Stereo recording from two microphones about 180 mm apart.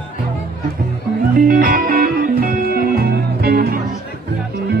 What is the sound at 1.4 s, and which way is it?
Music, 50° right (ahead or behind).